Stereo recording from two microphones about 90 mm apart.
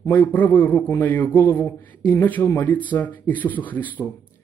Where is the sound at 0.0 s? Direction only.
20° left (ahead or behind).